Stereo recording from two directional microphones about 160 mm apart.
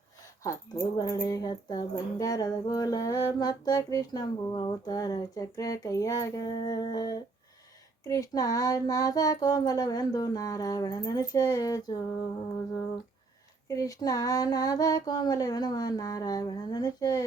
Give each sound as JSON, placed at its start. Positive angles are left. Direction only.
{"t": 0.4, "sound": "speech", "side_deg": 25}
{"t": 13.7, "sound": "speech", "side_deg": 20}